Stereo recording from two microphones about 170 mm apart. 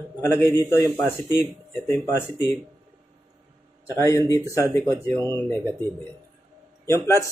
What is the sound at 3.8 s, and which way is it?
Speech, 15° left (ahead or behind).